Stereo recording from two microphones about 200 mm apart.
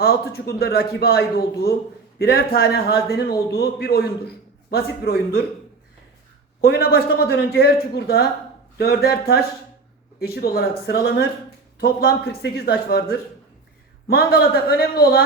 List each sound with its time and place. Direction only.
0.0 s a man's voice: 55° left (ahead or behind)
6.6 s a man's voice: 50° left (ahead or behind)